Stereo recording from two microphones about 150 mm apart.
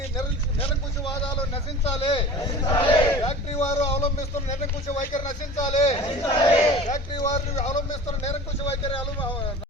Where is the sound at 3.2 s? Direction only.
45° left (ahead or behind).